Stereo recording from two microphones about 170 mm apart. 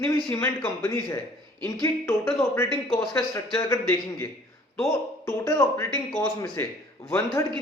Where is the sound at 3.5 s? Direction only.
15° left (ahead or behind).